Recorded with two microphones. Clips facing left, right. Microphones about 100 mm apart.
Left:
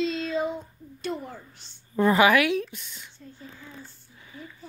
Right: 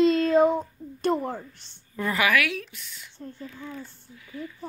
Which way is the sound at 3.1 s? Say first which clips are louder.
Right 7 dB; 60° right (ahead or behind).